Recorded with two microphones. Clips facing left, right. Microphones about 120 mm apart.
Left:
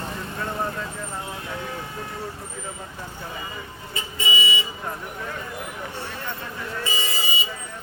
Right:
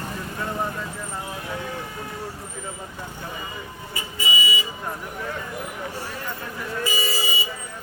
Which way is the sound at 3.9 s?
25° left (ahead or behind).